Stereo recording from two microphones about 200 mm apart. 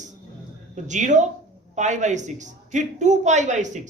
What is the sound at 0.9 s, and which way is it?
A woman's voice, 40° right (ahead or behind).